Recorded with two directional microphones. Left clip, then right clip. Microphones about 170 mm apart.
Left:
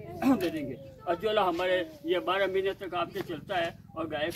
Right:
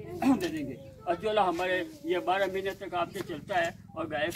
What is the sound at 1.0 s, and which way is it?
A man's voice, 5° left (ahead or behind).